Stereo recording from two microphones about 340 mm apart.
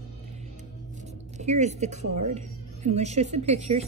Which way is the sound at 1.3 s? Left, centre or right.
Centre.